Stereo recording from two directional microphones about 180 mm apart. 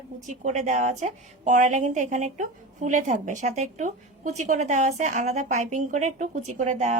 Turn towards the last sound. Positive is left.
turn(degrees=-40)  # may be behind; listen again after turning